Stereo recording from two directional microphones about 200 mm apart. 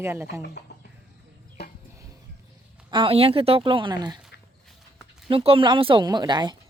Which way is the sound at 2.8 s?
25° right (ahead or behind).